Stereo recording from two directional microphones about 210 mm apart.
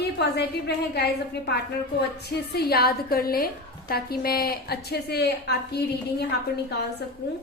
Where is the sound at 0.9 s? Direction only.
50° left (ahead or behind).